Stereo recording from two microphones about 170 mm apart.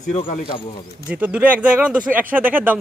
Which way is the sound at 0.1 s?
45° left (ahead or behind).